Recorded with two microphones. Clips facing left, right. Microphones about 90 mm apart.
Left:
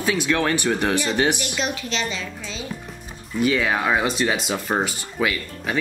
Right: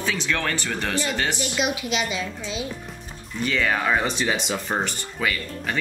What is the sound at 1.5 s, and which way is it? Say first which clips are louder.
A woman's voice: right 1 dB; 10° right (ahead or behind).